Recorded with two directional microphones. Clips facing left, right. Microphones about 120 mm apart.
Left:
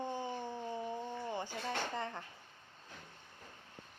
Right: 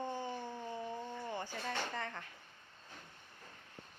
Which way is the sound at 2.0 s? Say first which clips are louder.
Left 2 dB; 25° left (ahead or behind).